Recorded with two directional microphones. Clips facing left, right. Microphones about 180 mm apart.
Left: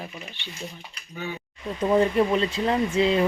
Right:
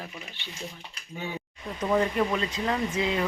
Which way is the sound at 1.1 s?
25° right (ahead or behind).